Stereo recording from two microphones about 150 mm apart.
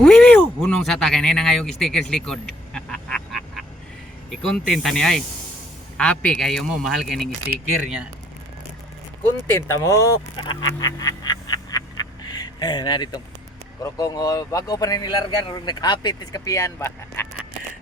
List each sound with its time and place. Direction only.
0.0 s speech: 5° left (ahead or behind)
1.8 s a sound: 5° left (ahead or behind)
4.3 s a man's voice: 5° left (ahead or behind)
9.6 s speech: 20° left (ahead or behind)